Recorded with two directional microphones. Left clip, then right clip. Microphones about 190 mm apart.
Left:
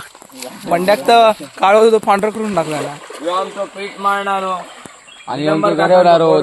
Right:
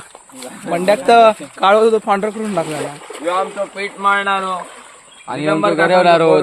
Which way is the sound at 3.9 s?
15° left (ahead or behind).